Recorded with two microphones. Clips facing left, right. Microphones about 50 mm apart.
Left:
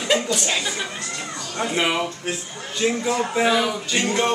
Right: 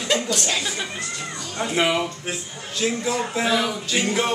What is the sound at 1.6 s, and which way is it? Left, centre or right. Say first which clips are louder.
Speech: right 1 dB; centre.